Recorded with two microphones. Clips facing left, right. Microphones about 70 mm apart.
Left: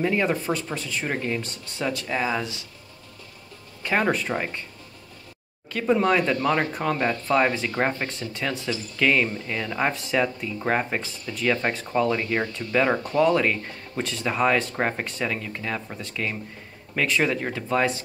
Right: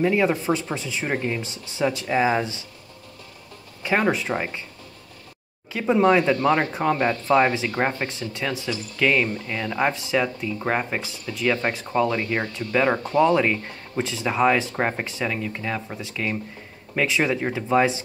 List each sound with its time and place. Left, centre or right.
0.0 s speech: centre
2.2 s speech: right
3.8 s speech: centre
5.7 s speech: centre
13.0 s speech: right
13.3 s speech: centre